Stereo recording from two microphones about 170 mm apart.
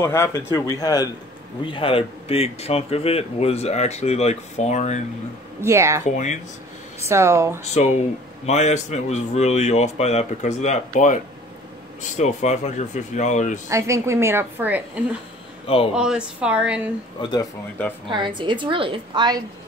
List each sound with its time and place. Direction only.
0.0 s speech: 15° left (ahead or behind); by 5.0 s 40° left (ahead or behind)
5.6 s a woman's voice: 15° right (ahead or behind)
6.0 s speech: 45° left (ahead or behind)
7.1 s a woman's voice: 15° right (ahead or behind)
7.7 s speech: 40° left (ahead or behind)
13.7 s a woman's voice: 15° right (ahead or behind)
15.6 s a man's voice: 35° left (ahead or behind)
15.9 s a woman's voice: 5° right (ahead or behind)
17.2 s speech: 25° left (ahead or behind)
18.1 s a woman's voice: 25° right (ahead or behind)